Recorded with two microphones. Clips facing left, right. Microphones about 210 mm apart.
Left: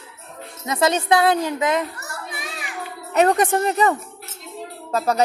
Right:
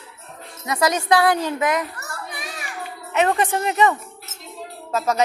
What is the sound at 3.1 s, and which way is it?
A woman's voice, 40° left (ahead or behind).